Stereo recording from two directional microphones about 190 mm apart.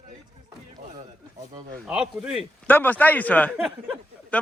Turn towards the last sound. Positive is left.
turn(degrees=5)  # may be behind; listen again after turning